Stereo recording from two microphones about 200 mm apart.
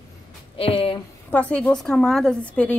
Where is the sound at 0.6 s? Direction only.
30° left (ahead or behind).